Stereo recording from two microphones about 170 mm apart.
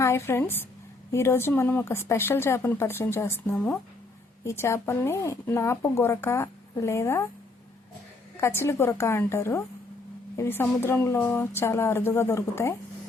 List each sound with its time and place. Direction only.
0.0 s speech: 15° left (ahead or behind)
8.4 s speech: 15° left (ahead or behind)